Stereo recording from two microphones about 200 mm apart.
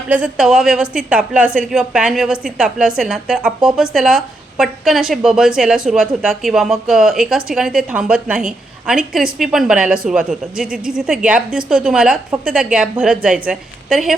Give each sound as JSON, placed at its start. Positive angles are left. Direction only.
{"t": 0.1, "sound": "speech", "side_deg": -5}